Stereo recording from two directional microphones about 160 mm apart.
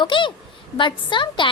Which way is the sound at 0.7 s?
30° left (ahead or behind).